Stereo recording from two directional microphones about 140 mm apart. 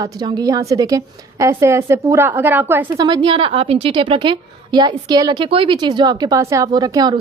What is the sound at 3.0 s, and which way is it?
A woman's voice, 35° right (ahead or behind).